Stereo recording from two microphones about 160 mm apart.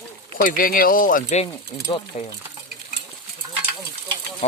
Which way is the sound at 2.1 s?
50° left (ahead or behind).